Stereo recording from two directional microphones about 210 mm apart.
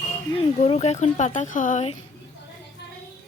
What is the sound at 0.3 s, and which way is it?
Speech, 30° left (ahead or behind).